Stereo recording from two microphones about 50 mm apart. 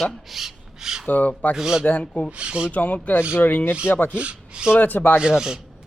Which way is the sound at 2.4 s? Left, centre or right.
Right.